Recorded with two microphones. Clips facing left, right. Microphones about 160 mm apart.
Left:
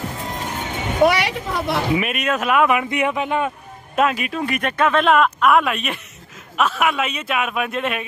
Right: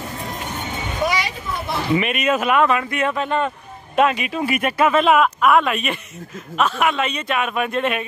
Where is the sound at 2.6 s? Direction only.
15° left (ahead or behind).